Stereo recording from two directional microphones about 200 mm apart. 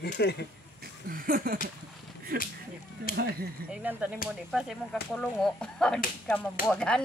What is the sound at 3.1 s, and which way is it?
Speech, 45° left (ahead or behind).